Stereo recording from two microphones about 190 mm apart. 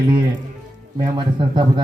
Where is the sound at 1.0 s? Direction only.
25° right (ahead or behind).